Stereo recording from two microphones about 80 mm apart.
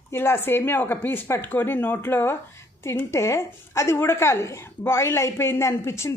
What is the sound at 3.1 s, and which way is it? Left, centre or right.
Speech, left.